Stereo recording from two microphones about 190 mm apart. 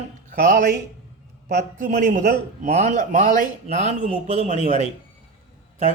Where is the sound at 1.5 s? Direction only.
55° right (ahead or behind).